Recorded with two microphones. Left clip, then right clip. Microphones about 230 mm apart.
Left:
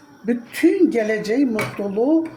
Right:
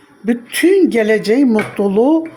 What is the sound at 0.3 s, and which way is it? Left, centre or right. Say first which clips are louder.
A woman's voice: right 5 dB; right.